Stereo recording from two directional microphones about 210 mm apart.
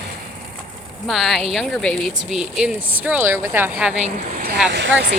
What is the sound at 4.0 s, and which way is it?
Speech, 35° right (ahead or behind).